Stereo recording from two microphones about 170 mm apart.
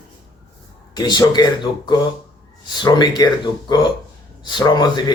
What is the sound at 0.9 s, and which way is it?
Speech, 25° left (ahead or behind).